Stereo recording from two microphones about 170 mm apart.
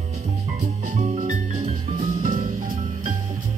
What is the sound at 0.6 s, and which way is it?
Music, 40° right (ahead or behind).